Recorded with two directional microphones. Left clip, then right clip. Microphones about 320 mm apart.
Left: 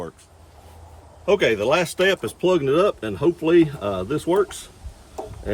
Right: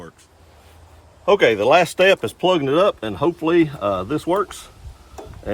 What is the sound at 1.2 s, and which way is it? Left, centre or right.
Speech, right.